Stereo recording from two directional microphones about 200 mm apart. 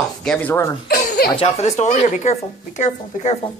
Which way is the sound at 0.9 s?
50° left (ahead or behind).